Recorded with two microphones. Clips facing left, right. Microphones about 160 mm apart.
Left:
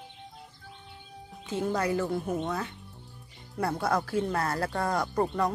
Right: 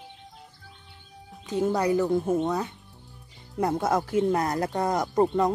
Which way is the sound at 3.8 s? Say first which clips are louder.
Right 4 dB; 20° right (ahead or behind).